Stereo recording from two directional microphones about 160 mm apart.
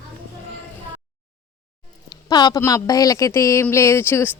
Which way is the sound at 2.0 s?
25° left (ahead or behind).